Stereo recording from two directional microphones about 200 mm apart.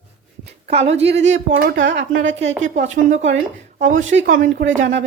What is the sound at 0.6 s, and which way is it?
A woman's voice, 30° right (ahead or behind).